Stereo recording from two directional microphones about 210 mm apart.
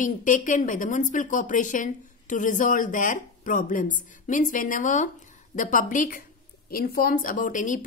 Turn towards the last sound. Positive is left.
turn(degrees=40)  # may be behind; listen again after turning